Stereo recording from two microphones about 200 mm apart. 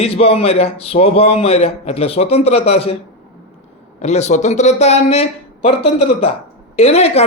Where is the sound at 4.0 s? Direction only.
35° left (ahead or behind).